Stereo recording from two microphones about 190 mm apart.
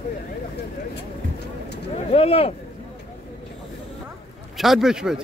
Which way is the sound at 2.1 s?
30° left (ahead or behind).